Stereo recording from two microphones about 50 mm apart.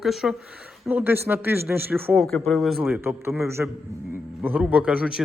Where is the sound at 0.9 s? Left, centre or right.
Right.